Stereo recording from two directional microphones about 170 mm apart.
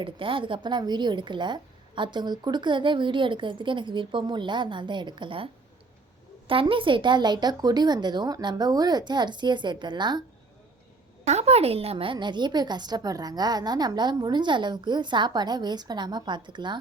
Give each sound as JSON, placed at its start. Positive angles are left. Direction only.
{"t": 0.0, "sound": "a woman's voice", "side_deg": -30}
{"t": 6.5, "sound": "a woman's voice", "side_deg": -30}
{"t": 11.3, "sound": "a woman's voice", "side_deg": -40}